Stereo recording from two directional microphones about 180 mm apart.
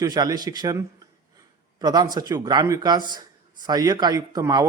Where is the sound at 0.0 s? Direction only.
20° right (ahead or behind).